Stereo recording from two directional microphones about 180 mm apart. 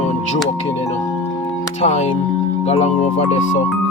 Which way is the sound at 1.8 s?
40° left (ahead or behind).